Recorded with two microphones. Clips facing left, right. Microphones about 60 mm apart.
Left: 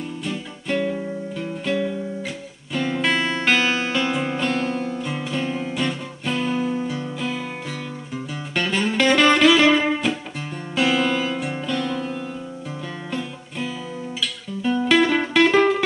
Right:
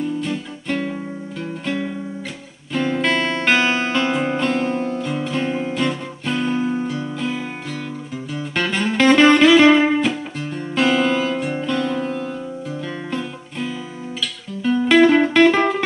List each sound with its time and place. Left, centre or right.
0.2 s music: centre
1.4 s music: centre
2.9 s music: centre
3.5 s music: centre
5.0 s music: centre
5.3 s music: right
5.8 s guitar: centre
6.3 s music: centre
6.6 s music: centre
6.9 s music: centre
8.5 s music: centre
10.7 s music: centre
11.6 s music: centre
13.1 s music: centre